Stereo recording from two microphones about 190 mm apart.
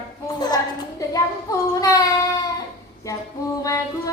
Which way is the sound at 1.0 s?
20° left (ahead or behind).